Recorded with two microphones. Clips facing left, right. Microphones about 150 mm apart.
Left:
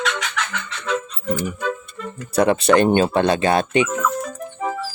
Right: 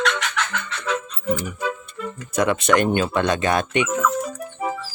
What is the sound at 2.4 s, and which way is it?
Speech, 35° left (ahead or behind).